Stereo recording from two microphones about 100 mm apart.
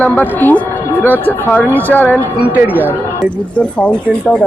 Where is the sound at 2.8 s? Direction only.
20° left (ahead or behind).